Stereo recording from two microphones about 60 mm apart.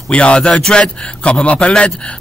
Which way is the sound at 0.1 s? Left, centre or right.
Centre.